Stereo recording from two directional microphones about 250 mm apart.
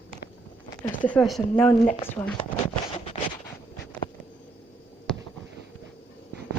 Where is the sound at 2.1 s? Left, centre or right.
Centre.